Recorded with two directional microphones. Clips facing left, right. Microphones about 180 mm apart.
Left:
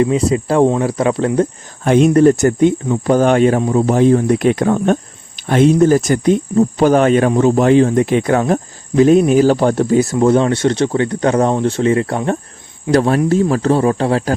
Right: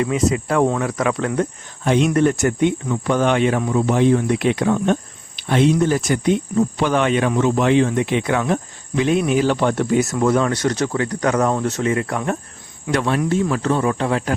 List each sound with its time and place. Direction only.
0.0 s speech: 30° left (ahead or behind)
1.8 s speech: 45° left (ahead or behind)